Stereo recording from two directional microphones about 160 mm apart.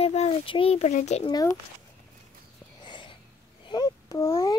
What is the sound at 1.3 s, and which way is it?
Speech, 20° left (ahead or behind).